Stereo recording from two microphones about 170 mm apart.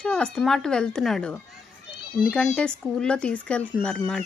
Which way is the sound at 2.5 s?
5° left (ahead or behind).